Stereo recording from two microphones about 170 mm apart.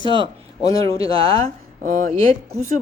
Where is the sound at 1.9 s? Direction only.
45° right (ahead or behind).